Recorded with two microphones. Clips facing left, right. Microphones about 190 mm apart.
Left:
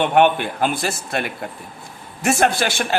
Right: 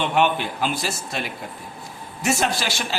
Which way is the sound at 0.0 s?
55° left (ahead or behind).